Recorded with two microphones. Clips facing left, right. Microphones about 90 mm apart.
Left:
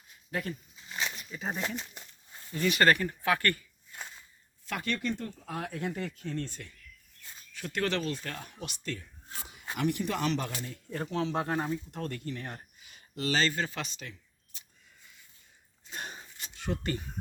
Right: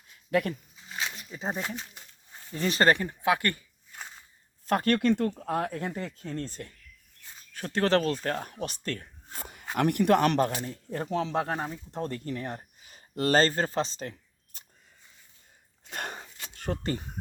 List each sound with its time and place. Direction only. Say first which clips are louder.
0.3 s speech: right 8 dB; 65° right (ahead or behind)
1.3 s speech: right 3 dB; 30° right (ahead or behind)
2.6 s speech: right 1 dB; 30° right (ahead or behind)
4.6 s speech: right 9 dB; 45° right (ahead or behind)
4.9 s speech: right 9 dB; 70° right (ahead or behind); by 8.0 s 35° right (ahead or behind)
8.0 s speech: right 7 dB; 45° right (ahead or behind)
11.3 s speech: right 1 dB; 25° right (ahead or behind); by 14.6 s 45° right (ahead or behind)
15.9 s a sound: right 5 dB; 65° right (ahead or behind)
16.6 s speech: right 2 dB; 35° right (ahead or behind)